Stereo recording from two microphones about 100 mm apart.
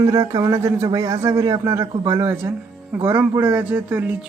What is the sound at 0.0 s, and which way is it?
Speech, 35° right (ahead or behind).